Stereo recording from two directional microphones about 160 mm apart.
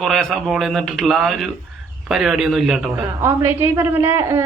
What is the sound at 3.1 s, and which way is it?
A woman's voice, 15° right (ahead or behind).